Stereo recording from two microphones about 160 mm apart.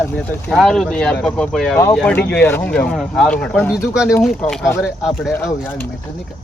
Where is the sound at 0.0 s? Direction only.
10° left (ahead or behind).